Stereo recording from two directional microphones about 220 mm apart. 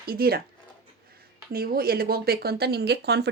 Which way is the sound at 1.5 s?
40° right (ahead or behind).